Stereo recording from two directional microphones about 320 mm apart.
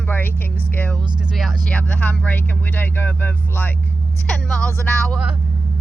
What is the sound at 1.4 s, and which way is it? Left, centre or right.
Speech, centre.